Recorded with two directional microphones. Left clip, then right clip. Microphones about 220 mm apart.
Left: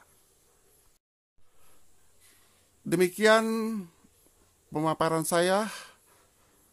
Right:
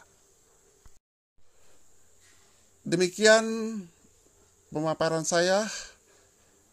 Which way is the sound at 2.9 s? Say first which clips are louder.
Right 1 dB; 15° left (ahead or behind).